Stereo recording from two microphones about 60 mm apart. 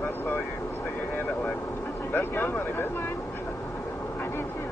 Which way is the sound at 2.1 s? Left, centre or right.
Left.